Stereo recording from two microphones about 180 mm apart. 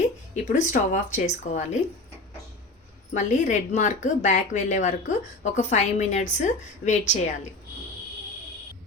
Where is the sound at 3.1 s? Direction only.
40° left (ahead or behind).